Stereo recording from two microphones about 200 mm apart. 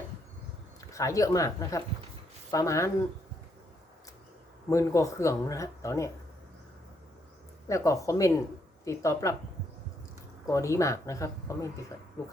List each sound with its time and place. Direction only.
0.9 s speech: 15° left (ahead or behind)
4.7 s speech: 15° left (ahead or behind)
7.7 s speech: 15° left (ahead or behind)
10.4 s speech: 15° left (ahead or behind)